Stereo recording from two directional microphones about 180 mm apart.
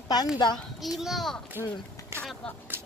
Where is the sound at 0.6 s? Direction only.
Centre (ahead or behind).